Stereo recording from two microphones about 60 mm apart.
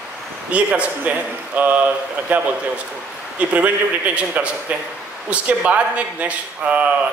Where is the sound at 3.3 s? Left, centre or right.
Right.